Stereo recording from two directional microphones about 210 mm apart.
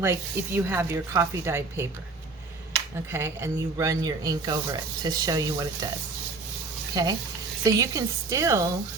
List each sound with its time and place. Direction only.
0.0 s speech: 10° right (ahead or behind)
3.1 s speech: 10° right (ahead or behind)
6.9 s speech: 15° right (ahead or behind)